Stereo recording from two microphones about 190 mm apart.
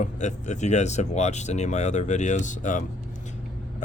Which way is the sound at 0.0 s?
40° left (ahead or behind).